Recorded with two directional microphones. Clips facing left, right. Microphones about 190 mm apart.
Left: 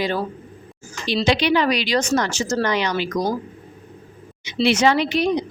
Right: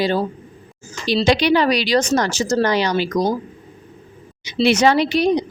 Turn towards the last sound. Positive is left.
turn(degrees=-35)  # may be behind; listen again after turning